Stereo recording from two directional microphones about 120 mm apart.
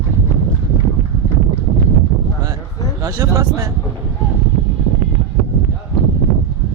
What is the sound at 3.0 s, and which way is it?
Speech, 30° right (ahead or behind).